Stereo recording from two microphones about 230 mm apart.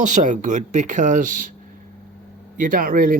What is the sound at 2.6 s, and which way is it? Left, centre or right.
Speech, right.